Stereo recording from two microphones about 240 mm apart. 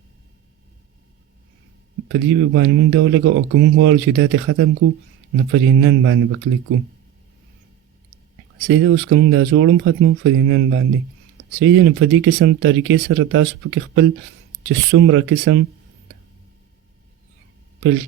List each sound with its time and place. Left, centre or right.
2.1 s speech: right
8.6 s speech: right